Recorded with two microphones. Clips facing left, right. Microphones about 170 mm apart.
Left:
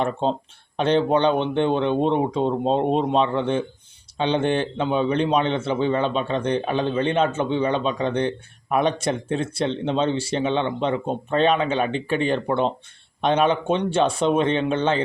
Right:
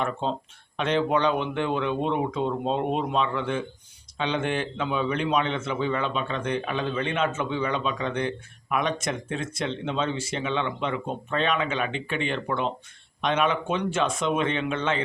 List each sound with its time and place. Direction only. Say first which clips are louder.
0.0 s a man's voice: left 5 dB; 30° left (ahead or behind)